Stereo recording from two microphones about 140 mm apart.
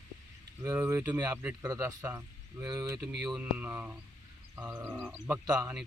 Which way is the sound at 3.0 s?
5° right (ahead or behind).